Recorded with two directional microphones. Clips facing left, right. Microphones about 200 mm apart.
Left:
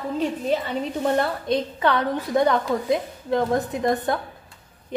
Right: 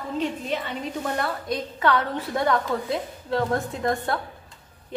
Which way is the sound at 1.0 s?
25° left (ahead or behind).